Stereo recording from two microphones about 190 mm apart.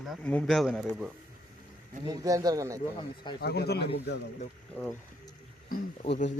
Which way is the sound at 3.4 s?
60° left (ahead or behind).